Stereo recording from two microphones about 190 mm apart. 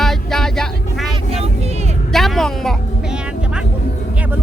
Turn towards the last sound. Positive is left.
turn(degrees=0)  # may be behind; listen again after turning